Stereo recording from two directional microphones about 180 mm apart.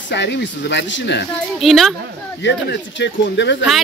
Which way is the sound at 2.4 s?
80° left.